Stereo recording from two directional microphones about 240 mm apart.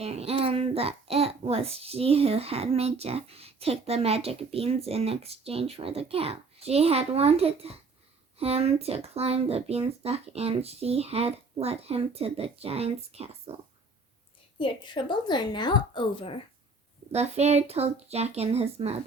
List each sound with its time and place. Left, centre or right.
0.0 s a child's voice: right
14.6 s a woman's voice: centre
17.1 s a child's voice: right